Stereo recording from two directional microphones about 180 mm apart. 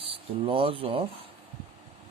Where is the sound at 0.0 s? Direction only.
30° right (ahead or behind).